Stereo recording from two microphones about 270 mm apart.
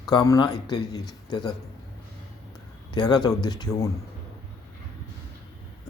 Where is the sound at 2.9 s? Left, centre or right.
Centre.